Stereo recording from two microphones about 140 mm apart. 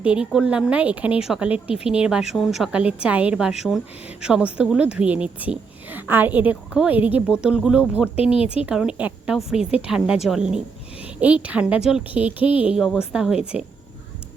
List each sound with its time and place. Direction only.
0.0 s a woman's voice: 10° right (ahead or behind)
8.4 s speech: 40° left (ahead or behind)
8.6 s a woman's voice: 5° right (ahead or behind)